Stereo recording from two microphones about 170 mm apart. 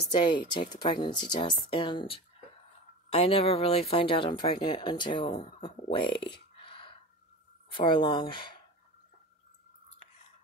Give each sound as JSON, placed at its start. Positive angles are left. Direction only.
{"t": 0.2, "sound": "a woman's voice", "side_deg": 25}
{"t": 6.6, "sound": "gasp", "side_deg": 30}
{"t": 7.7, "sound": "speech", "side_deg": 30}